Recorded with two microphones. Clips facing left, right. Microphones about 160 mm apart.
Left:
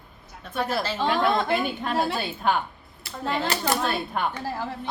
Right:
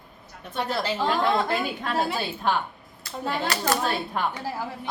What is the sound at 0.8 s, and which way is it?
Speech, 15° right (ahead or behind).